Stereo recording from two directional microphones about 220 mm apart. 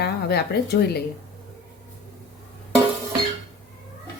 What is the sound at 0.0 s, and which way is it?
Speech, 50° left (ahead or behind).